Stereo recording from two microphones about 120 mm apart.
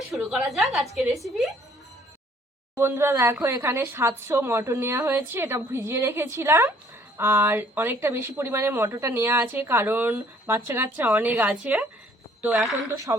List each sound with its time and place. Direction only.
0.1 s a woman's voice: centre (ahead or behind)
2.7 s speech: 20° right (ahead or behind)
13.1 s speech: 25° right (ahead or behind)